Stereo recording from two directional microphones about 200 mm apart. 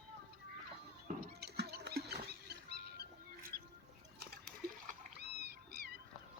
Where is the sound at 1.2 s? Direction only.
55° right (ahead or behind).